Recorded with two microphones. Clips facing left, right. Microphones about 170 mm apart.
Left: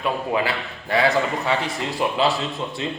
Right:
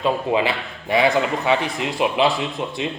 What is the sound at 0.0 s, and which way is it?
A man's voice, 20° right (ahead or behind).